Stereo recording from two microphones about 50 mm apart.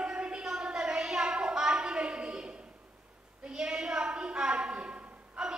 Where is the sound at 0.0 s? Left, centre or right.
Centre.